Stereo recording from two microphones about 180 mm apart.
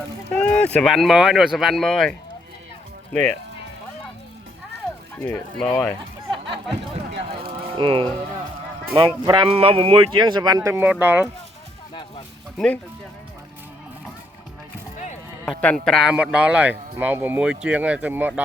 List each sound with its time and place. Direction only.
0.3 s speech: 5° left (ahead or behind)
5.2 s speech: 10° left (ahead or behind)
7.1 s a sound: 70° right (ahead or behind)
7.8 s speech: 30° right (ahead or behind); by 11.3 s 10° right (ahead or behind)
12.5 s speech: 5° left (ahead or behind)
14.9 s music: 40° left (ahead or behind)
15.4 s speech: 5° left (ahead or behind)